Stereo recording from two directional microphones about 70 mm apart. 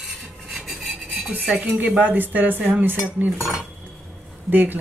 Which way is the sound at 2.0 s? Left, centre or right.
Right.